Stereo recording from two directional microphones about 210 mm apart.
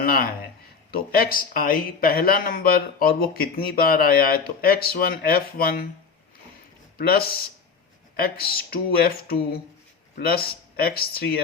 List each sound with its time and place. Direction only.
0.0 s speech: 45° left (ahead or behind)
7.1 s speech: 45° left (ahead or behind)